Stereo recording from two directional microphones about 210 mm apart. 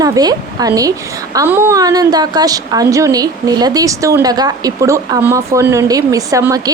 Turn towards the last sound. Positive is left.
turn(degrees=-15)  # may be behind; listen again after turning